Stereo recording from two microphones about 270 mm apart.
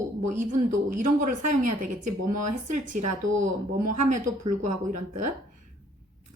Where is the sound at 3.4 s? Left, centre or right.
Right.